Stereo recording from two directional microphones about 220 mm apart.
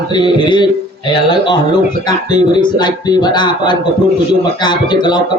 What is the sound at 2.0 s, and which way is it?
A man's voice, 20° left (ahead or behind).